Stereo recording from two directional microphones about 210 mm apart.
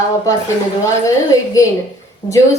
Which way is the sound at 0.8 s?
15° left (ahead or behind).